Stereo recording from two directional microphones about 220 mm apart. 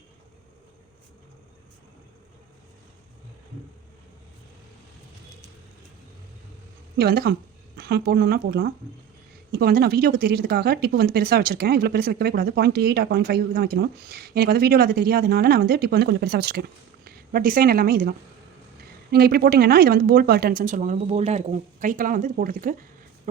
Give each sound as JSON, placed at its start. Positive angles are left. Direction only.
{"t": 6.9, "sound": "speech", "side_deg": -45}
{"t": 19.1, "sound": "a woman's voice", "side_deg": -45}